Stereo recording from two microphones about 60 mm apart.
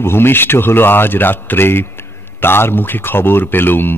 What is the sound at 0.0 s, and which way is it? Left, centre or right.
A man's voice, left.